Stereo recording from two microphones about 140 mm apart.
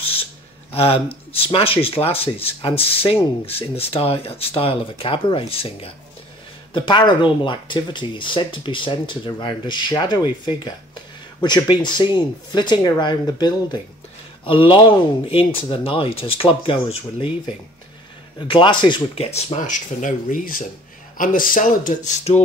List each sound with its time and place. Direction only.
0.0 s a sound: 45° left (ahead or behind)
0.7 s speech: 45° left (ahead or behind)
18.5 s speech: 35° left (ahead or behind)
19.3 s speech: 55° left (ahead or behind)